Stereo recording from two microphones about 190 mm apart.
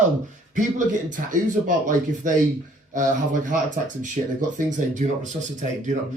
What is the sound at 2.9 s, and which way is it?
Speech, 45° right (ahead or behind).